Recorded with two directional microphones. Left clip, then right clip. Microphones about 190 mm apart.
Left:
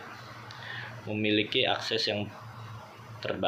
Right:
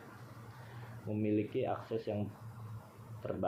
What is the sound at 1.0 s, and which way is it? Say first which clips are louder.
Speech: left 7 dB; 20° left (ahead or behind).